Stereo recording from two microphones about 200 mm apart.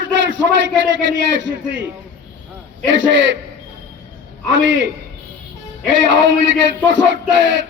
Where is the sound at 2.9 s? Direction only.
65° right (ahead or behind).